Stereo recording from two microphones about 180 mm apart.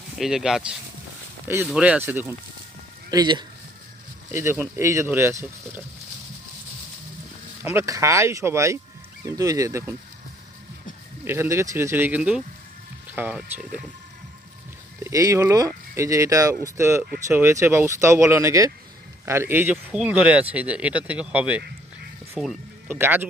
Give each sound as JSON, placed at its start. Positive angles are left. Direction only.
{"t": 0.2, "sound": "speech", "side_deg": 0}
{"t": 3.1, "sound": "speech", "side_deg": -25}
{"t": 7.6, "sound": "speech", "side_deg": -15}
{"t": 11.3, "sound": "speech", "side_deg": -15}
{"t": 14.9, "sound": "speech", "side_deg": -15}